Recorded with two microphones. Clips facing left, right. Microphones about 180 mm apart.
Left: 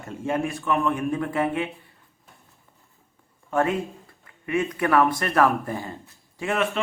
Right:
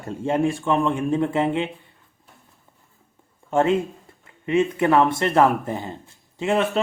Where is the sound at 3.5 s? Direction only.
25° right (ahead or behind).